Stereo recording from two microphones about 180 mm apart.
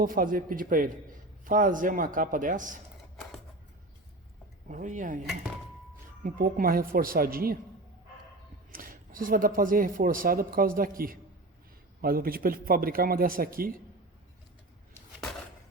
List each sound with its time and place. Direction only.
0.0 s speech: 50° right (ahead or behind)
4.7 s speech: 45° right (ahead or behind)
6.2 s speech: 55° right (ahead or behind)
8.7 s a man's voice: 50° right (ahead or behind)